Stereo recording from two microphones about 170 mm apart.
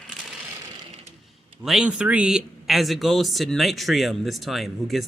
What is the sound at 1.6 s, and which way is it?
Speech, 5° right (ahead or behind).